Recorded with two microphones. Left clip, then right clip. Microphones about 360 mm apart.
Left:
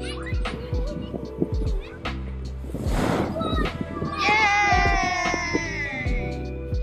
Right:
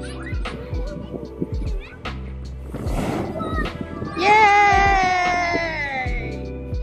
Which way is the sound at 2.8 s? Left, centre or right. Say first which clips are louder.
Left 1 dB; centre.